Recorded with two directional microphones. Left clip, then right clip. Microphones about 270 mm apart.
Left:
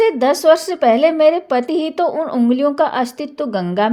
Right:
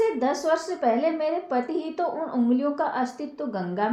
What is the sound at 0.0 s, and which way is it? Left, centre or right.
A woman's voice, left.